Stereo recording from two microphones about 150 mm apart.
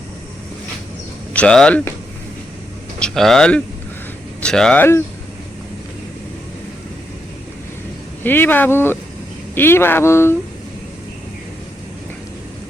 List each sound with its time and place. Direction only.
1.3 s speech: 5° left (ahead or behind)
3.0 s speech: 5° left (ahead or behind)
8.2 s speech: 15° left (ahead or behind)